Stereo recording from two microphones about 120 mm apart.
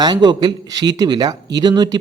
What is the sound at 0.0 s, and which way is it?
A man's voice, 35° right (ahead or behind).